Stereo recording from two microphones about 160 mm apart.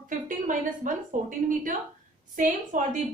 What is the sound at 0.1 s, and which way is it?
Speech, 55° right (ahead or behind).